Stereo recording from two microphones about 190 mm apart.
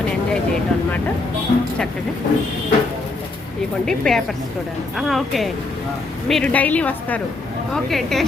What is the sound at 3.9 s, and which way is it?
A woman's voice, 5° left (ahead or behind).